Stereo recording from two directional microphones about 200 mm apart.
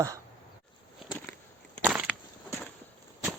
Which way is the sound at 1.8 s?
10° right (ahead or behind).